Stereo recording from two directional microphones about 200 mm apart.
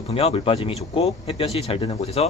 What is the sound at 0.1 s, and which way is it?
A man's voice, 30° left (ahead or behind).